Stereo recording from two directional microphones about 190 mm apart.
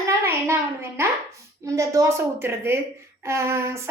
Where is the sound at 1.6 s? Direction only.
15° right (ahead or behind).